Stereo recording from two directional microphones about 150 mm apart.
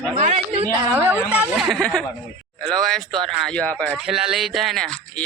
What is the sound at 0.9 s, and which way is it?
Speech, 15° right (ahead or behind).